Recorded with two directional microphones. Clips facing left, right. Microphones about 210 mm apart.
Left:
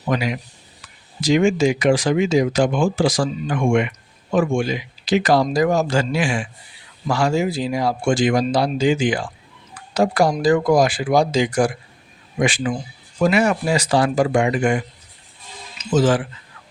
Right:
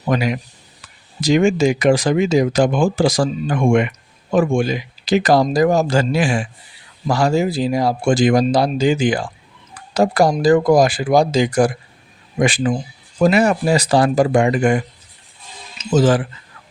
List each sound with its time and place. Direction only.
0.1 s speech: 45° right (ahead or behind)
16.0 s speech: 40° right (ahead or behind)